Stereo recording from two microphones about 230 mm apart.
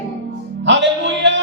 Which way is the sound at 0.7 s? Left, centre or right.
Right.